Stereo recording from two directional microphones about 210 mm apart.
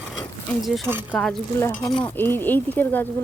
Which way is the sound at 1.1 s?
5° left (ahead or behind).